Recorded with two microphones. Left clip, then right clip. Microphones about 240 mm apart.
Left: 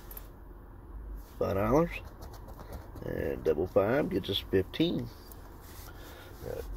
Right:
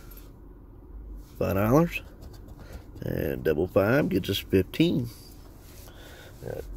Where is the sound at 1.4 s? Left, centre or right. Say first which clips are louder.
Right 4 dB; right.